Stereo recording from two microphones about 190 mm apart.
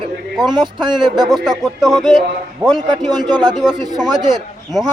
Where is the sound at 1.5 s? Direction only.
Centre (ahead or behind).